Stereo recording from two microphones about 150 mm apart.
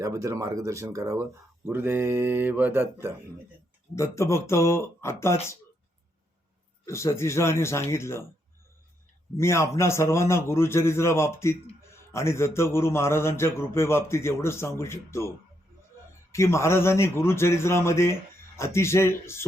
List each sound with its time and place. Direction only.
0.0 s speech: 20° right (ahead or behind)
3.9 s speech: 20° left (ahead or behind)
6.8 s speech: 20° left (ahead or behind)
9.4 s speech: 20° left (ahead or behind)
16.3 s speech: 20° left (ahead or behind)